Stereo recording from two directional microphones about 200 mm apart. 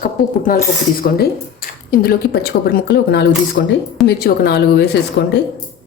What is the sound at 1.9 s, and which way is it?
A woman's voice, 45° left (ahead or behind).